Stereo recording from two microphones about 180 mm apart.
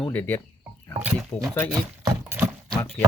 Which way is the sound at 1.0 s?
5° right (ahead or behind).